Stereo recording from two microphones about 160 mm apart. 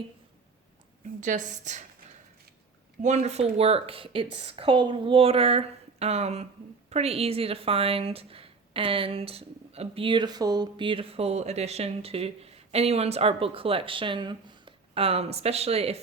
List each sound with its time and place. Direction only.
1.2 s a woman's voice: 50° right (ahead or behind)
3.0 s a woman's voice: 50° right (ahead or behind)